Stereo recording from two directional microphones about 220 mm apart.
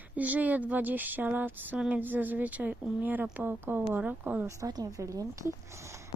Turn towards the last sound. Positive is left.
turn(degrees=-15)  # may be behind; listen again after turning